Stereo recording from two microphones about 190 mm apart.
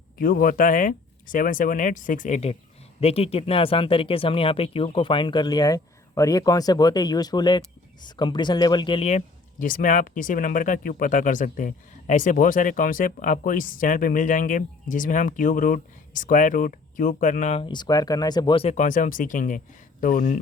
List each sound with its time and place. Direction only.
0.2 s speech: 50° left (ahead or behind)